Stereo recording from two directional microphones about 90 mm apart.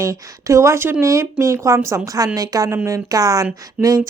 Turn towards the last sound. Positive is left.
turn(degrees=-40)  # may be behind; listen again after turning